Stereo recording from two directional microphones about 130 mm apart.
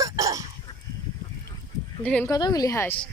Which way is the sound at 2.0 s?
10° left (ahead or behind).